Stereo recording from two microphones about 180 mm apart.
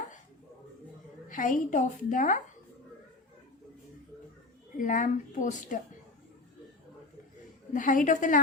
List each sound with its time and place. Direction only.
1.3 s a woman's voice: 45° left (ahead or behind)
4.8 s a woman's voice: 45° left (ahead or behind)
7.7 s a woman's voice: 45° left (ahead or behind)